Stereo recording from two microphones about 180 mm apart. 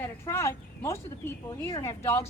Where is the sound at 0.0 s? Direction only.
15° left (ahead or behind).